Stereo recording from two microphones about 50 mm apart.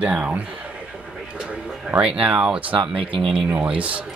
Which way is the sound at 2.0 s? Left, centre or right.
Right.